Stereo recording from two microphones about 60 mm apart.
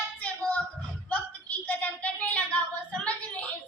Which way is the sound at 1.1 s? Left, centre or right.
Left.